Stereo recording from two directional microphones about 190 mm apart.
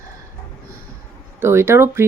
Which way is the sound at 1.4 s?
15° right (ahead or behind).